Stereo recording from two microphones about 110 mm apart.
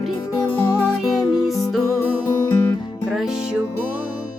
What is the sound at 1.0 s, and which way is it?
Music, centre (ahead or behind).